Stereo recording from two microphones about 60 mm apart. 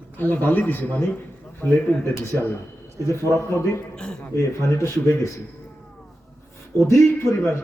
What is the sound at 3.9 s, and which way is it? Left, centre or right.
Speech, centre.